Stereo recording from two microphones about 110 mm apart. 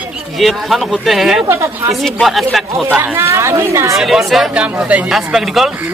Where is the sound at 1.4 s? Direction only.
25° right (ahead or behind).